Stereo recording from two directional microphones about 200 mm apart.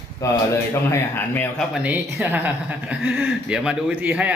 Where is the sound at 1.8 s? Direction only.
10° right (ahead or behind).